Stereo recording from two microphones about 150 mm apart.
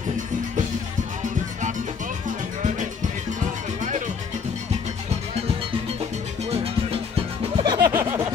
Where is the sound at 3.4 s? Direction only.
55° right (ahead or behind).